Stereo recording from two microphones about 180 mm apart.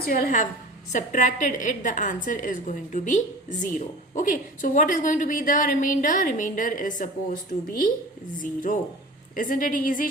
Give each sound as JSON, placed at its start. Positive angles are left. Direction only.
{"t": 0.0, "sound": "a woman's voice", "side_deg": 55}
{"t": 8.4, "sound": "a woman's voice", "side_deg": 50}